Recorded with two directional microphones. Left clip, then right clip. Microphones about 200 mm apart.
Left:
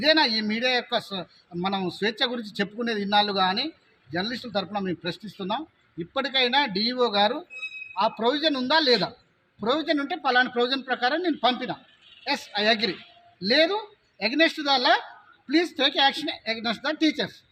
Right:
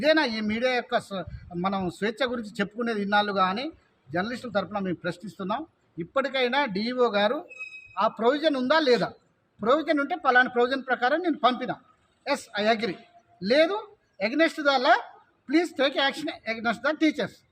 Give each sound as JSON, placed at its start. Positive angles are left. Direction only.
{"t": 0.0, "sound": "speech", "side_deg": -5}
{"t": 9.7, "sound": "speech", "side_deg": -30}
{"t": 10.0, "sound": "speech", "side_deg": -5}